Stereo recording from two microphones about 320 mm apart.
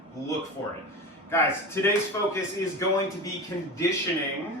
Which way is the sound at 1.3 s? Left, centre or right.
Centre.